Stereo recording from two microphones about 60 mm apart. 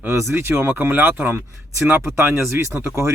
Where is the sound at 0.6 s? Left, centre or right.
Right.